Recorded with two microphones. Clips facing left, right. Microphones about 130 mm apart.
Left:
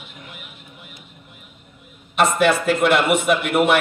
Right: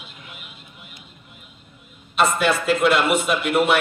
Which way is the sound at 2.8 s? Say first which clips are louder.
Left 2 dB; 60° left (ahead or behind).